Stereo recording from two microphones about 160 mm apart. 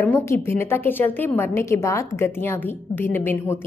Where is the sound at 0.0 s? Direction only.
10° left (ahead or behind).